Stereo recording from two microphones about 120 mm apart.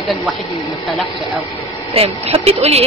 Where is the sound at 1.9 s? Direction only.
55° right (ahead or behind).